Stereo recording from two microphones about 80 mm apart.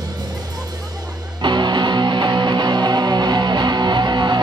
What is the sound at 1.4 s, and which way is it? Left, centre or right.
Music, right.